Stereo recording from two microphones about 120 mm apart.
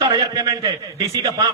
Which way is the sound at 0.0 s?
30° right (ahead or behind).